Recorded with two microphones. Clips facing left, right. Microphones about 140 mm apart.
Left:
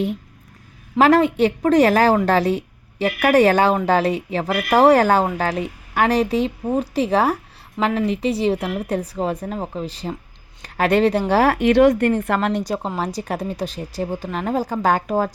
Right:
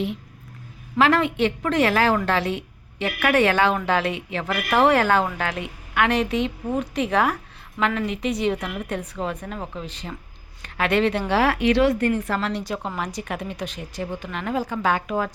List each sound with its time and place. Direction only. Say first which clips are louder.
0.9 s a woman's voice: left 5 dB; 40° left (ahead or behind)
13.1 s speech: left 5 dB; 35° left (ahead or behind)